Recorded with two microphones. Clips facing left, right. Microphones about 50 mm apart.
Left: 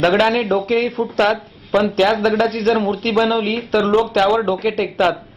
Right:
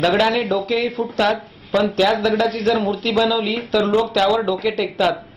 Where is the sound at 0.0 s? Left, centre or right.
Left.